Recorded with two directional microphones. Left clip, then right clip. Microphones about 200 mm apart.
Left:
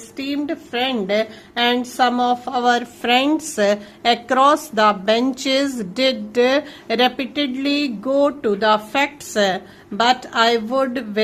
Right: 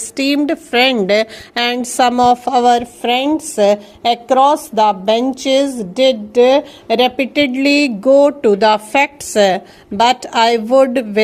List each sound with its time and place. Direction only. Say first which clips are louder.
0.2 s a woman's voice: right 9 dB; 35° right (ahead or behind); by 7.3 s 15° right (ahead or behind)
7.3 s speech: right 8 dB; 30° right (ahead or behind)